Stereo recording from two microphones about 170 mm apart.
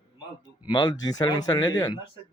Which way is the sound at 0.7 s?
25° left (ahead or behind).